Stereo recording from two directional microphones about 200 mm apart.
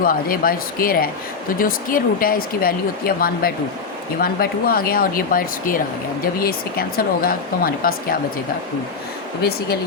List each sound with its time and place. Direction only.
0.0 s speech: 45° left (ahead or behind)
9.4 s speech: 50° left (ahead or behind)